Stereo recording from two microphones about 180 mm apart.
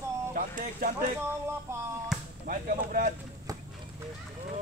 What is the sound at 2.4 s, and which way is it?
Speech, 50° right (ahead or behind).